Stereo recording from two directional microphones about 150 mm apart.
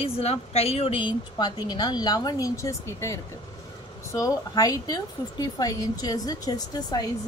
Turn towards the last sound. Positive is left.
turn(degrees=25)  # may be behind; listen again after turning